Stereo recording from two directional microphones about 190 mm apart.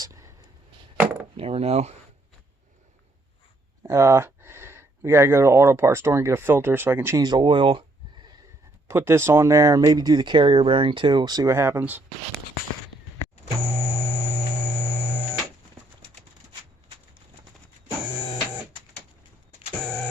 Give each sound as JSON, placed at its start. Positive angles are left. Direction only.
{"t": 0.0, "sound": "a sound", "side_deg": -15}
{"t": 1.4, "sound": "speech", "side_deg": -30}
{"t": 3.8, "sound": "speech", "side_deg": -15}
{"t": 8.9, "sound": "speech", "side_deg": -15}